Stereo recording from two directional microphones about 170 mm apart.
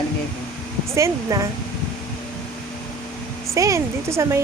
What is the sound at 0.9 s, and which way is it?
Speech, 20° right (ahead or behind).